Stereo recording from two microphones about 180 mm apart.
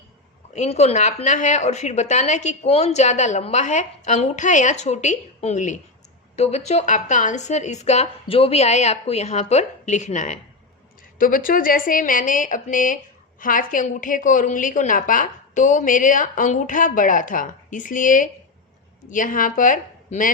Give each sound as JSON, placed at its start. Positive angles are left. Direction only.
{"t": 0.5, "sound": "a woman's voice", "side_deg": 40}